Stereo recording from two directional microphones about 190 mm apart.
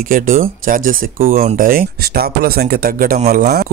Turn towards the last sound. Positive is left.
turn(degrees=-55)  # may be behind; listen again after turning